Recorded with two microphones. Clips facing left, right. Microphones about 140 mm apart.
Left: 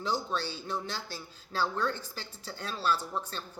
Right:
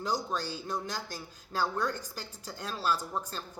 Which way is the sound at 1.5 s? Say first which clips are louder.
Even; 10° right (ahead or behind).